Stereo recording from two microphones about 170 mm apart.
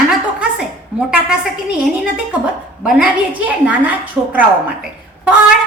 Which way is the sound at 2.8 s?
Centre (ahead or behind).